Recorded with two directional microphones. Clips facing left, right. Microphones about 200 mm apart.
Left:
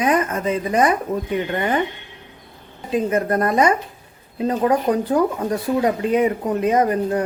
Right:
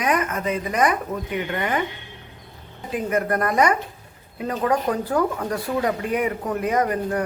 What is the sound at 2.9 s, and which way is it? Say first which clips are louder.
Speech: left 4 dB; 25° left (ahead or behind).